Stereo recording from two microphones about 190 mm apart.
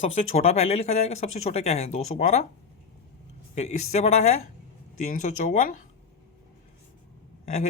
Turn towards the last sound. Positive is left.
turn(degrees=35)  # may be behind; listen again after turning